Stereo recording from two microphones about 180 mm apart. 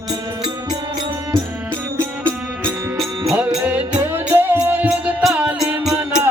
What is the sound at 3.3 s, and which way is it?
Music, 5° right (ahead or behind).